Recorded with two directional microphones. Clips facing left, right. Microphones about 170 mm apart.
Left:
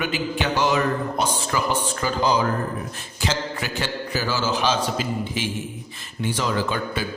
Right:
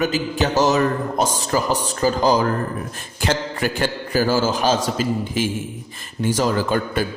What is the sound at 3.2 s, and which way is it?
A man's voice, 50° right (ahead or behind).